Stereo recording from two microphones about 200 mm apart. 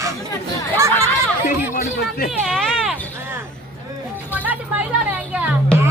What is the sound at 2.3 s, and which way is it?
Speech, centre (ahead or behind).